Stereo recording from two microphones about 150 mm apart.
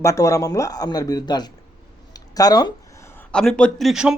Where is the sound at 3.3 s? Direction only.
5° left (ahead or behind).